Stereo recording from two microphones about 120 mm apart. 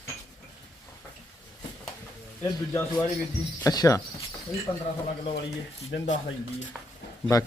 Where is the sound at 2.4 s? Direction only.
20° left (ahead or behind).